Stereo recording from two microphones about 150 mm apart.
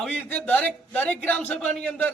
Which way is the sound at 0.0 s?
10° left (ahead or behind).